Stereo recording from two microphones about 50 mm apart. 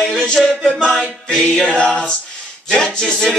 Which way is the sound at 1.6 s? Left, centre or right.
Centre.